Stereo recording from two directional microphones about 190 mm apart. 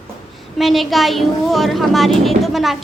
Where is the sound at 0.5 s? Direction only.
Centre (ahead or behind).